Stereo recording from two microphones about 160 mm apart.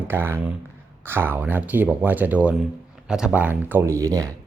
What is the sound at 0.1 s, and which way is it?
Speech, 15° right (ahead or behind).